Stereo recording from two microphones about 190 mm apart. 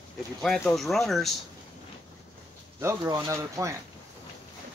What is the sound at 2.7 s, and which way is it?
Speech, 15° right (ahead or behind).